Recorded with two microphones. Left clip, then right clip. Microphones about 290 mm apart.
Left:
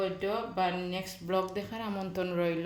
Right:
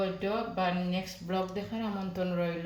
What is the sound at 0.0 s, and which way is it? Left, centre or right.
Speech, left.